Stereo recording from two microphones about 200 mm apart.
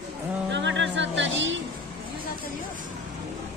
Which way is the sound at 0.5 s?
65° right (ahead or behind).